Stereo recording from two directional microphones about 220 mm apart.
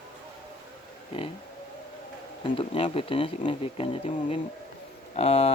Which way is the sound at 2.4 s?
25° left (ahead or behind).